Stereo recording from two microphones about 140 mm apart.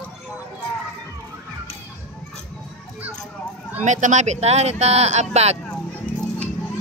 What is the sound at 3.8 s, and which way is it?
Speech, 60° right (ahead or behind).